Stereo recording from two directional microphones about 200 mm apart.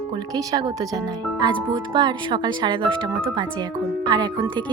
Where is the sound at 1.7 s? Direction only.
20° right (ahead or behind).